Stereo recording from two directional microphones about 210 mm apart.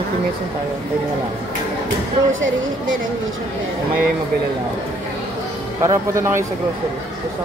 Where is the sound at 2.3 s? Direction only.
65° right (ahead or behind).